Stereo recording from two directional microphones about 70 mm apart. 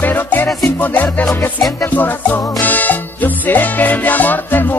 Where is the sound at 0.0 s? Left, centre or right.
Left.